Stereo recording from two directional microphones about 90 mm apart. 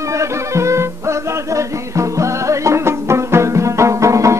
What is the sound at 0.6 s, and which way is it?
Music, 30° right (ahead or behind).